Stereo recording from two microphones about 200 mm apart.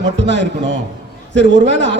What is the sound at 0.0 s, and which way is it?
A man's voice, 60° right (ahead or behind).